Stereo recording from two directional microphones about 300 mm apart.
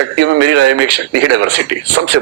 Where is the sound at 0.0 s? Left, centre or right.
Right.